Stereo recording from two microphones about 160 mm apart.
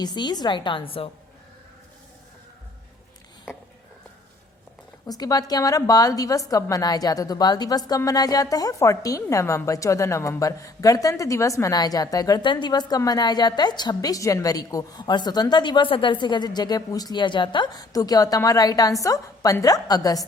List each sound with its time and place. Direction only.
0.0 s a woman's voice: 25° left (ahead or behind)
5.0 s a woman's voice: 25° left (ahead or behind)